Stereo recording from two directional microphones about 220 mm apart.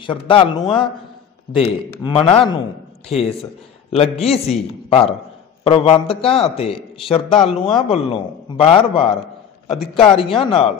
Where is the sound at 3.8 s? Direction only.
25° left (ahead or behind).